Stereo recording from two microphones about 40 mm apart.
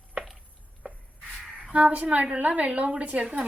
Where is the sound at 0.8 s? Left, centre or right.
Right.